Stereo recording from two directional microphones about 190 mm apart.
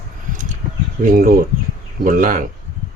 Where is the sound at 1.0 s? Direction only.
50° right (ahead or behind).